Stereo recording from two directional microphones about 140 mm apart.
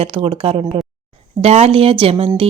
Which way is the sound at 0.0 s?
40° right (ahead or behind).